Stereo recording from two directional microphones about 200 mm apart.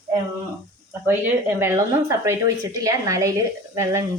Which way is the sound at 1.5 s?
15° right (ahead or behind).